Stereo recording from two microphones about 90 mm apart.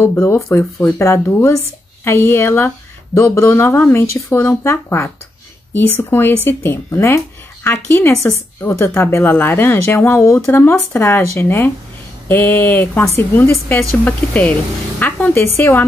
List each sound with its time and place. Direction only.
0.0 s speech: 25° left (ahead or behind)
8.1 s a woman's voice: 35° left (ahead or behind)
14.0 s speech: 20° left (ahead or behind)